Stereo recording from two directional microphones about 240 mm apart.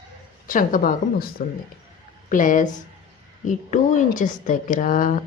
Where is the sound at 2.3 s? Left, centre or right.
Left.